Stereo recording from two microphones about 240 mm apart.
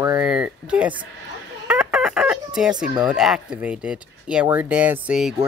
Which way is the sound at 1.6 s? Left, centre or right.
Centre.